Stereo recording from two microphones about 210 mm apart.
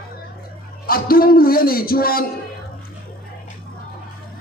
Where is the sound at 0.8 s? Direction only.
45° left (ahead or behind).